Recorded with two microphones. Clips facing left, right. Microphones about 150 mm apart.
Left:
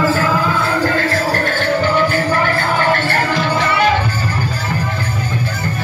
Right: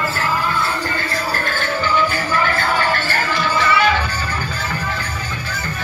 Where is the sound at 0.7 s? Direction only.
90° left; by 2.3 s 55° left (ahead or behind).